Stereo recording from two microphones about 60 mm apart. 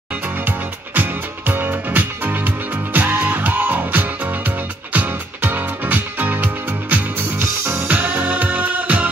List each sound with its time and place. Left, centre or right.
0.5 s music: right
7.3 s music: right
8.0 s music: right